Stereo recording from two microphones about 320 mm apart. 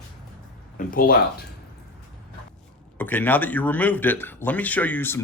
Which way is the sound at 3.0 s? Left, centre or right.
Centre.